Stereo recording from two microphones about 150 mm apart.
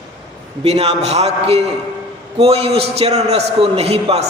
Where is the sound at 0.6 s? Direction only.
45° right (ahead or behind).